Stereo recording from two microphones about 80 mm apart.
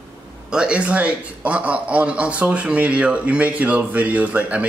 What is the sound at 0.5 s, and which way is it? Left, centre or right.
A man's voice, centre.